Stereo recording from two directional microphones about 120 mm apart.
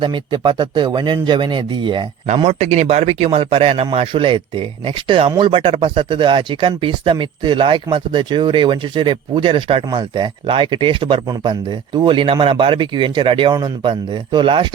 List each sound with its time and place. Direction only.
0.0 s speech: 45° right (ahead or behind)
2.2 s a man's voice: 70° right (ahead or behind); by 14.7 s 45° right (ahead or behind)